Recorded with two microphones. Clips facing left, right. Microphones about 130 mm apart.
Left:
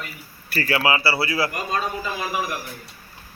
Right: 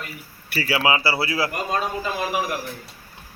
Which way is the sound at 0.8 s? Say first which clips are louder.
Right 1 dB; 20° right (ahead or behind).